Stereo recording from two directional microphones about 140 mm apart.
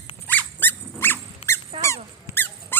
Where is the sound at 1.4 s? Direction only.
40° left (ahead or behind).